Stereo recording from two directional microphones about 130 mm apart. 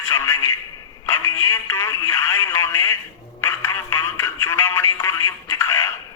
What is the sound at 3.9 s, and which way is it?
Speech, 20° left (ahead or behind).